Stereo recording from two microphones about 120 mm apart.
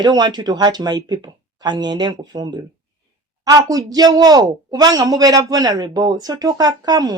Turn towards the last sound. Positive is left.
turn(degrees=-35)  # may be behind; listen again after turning